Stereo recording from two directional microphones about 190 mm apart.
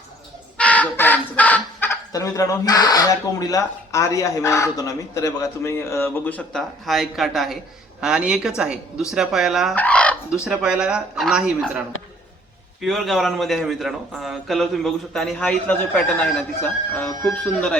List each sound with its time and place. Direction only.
0.5 s a man's voice: 5° left (ahead or behind)
9.7 s fowl: 5° left (ahead or behind)
10.4 s a man's voice: 5° right (ahead or behind)
12.8 s a man's voice: centre (ahead or behind)
17.4 s speech: 5° left (ahead or behind)